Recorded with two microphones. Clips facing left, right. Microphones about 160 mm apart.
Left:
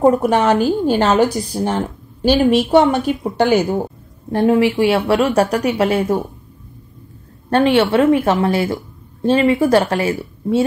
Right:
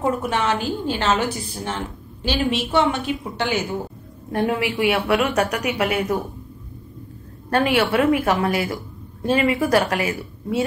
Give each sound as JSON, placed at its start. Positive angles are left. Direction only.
{"t": 0.0, "sound": "a woman's voice", "side_deg": 45}
{"t": 4.3, "sound": "speech", "side_deg": 30}
{"t": 7.4, "sound": "speech", "side_deg": 30}